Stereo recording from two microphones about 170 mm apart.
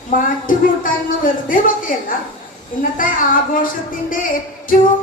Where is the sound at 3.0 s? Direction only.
55° left (ahead or behind).